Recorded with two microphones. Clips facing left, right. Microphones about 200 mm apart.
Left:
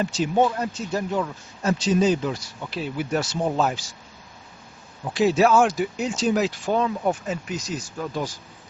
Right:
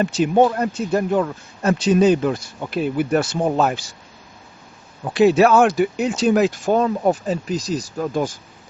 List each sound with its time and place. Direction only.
0.0 s speech: 60° right (ahead or behind)
5.0 s speech: 60° right (ahead or behind)